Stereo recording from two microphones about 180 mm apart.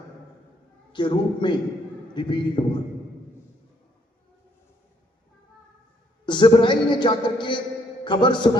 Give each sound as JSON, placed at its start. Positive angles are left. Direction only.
{"t": 0.9, "sound": "a man's voice", "side_deg": 25}
{"t": 6.2, "sound": "a man's voice", "side_deg": 25}